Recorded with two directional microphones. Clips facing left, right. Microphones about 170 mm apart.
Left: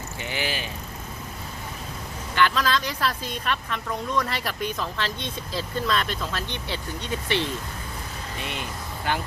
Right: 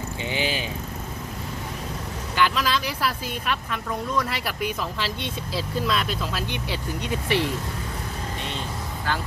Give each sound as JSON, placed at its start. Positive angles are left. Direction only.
{"t": 0.2, "sound": "vehicle", "side_deg": -20}
{"t": 2.3, "sound": "a woman's voice", "side_deg": -10}
{"t": 9.1, "sound": "speech", "side_deg": 20}